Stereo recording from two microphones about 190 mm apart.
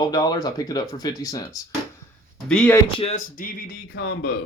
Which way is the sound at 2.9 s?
35° left (ahead or behind).